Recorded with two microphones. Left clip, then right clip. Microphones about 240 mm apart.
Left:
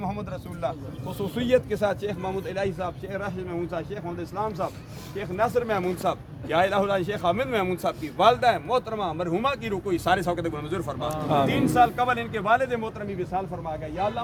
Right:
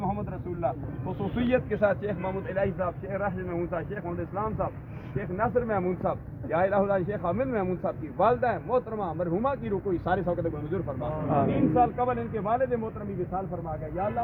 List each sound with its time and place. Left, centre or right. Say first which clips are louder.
0.0 s a sound: even; left
1.2 s a man's voice: left 4 dB; left
11.3 s a man's voice: left 3 dB; left
11.7 s speech: left 6 dB; centre